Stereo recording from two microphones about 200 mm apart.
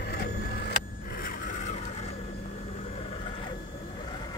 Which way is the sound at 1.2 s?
40° left (ahead or behind).